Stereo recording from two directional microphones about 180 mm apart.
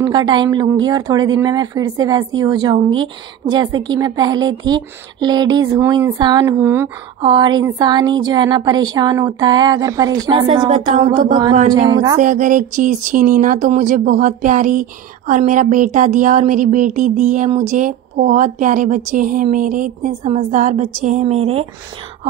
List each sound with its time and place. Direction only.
0.0 s speech: 25° right (ahead or behind)
6.5 s speech: 15° right (ahead or behind)
7.2 s speech: 25° right (ahead or behind)
10.7 s speech: 40° right (ahead or behind)
11.7 s speech: 20° right (ahead or behind)
12.2 s speech: 45° right (ahead or behind)